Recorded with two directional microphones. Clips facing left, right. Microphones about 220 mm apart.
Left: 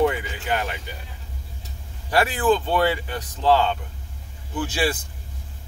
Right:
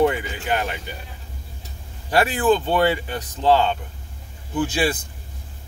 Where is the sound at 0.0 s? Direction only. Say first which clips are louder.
Right 2 dB; 25° right (ahead or behind).